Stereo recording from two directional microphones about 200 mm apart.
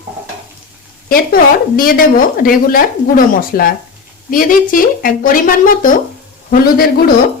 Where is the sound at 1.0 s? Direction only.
45° left (ahead or behind).